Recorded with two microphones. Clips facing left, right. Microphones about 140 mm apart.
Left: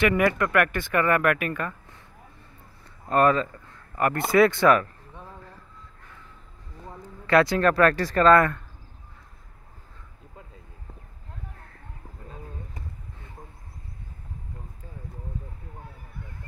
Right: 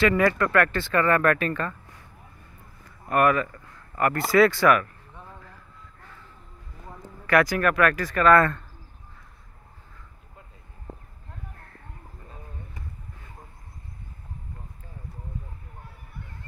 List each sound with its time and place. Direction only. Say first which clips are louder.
0.0 s speech: right 1 dB; 20° left (ahead or behind)
3.1 s speech: left 1 dB; 25° left (ahead or behind)
7.2 s speech: left 2 dB; 25° left (ahead or behind)